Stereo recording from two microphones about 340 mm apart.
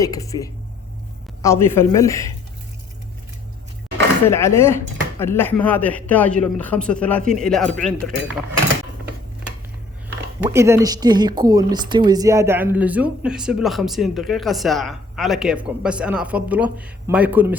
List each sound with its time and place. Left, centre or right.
0.0 s speech: centre
4.3 s speech: centre
10.5 s speech: centre